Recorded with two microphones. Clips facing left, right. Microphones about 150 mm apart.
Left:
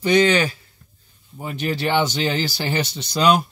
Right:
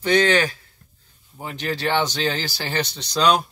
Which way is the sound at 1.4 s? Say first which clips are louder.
Left 2 dB; 5° left (ahead or behind).